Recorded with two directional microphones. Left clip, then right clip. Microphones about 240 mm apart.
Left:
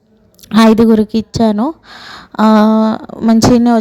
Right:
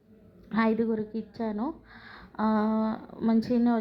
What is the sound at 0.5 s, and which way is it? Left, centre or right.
A woman's voice, left.